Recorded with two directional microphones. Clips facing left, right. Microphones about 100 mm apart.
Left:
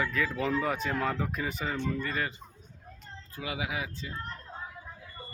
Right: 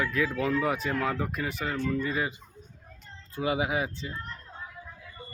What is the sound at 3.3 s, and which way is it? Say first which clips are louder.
Speech: right 7 dB; 30° right (ahead or behind).